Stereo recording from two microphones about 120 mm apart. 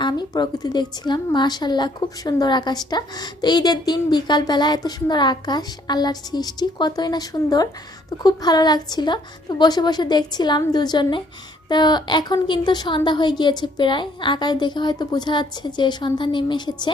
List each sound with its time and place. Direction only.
0.0 s a woman's voice: 35° left (ahead or behind)